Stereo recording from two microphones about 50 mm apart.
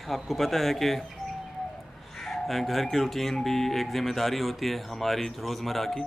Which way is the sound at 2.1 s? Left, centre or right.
Centre.